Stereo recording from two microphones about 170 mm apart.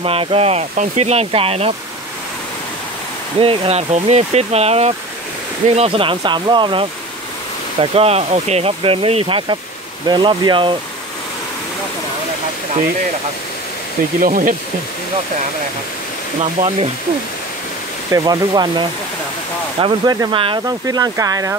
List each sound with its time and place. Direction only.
0.0 s speech: 35° right (ahead or behind)
3.3 s speech: 35° right (ahead or behind)
14.2 s speech: 55° right (ahead or behind)
16.5 s speech: 35° right (ahead or behind)
18.1 s speech: 20° right (ahead or behind)